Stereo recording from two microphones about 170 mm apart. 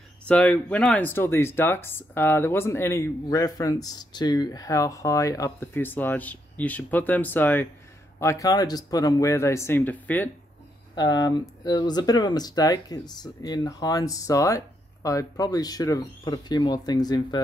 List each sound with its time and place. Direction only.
0.3 s speech: 10° left (ahead or behind)
11.0 s speech: 25° left (ahead or behind)